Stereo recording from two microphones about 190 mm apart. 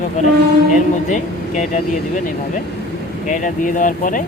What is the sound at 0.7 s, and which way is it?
Speech, 40° left (ahead or behind).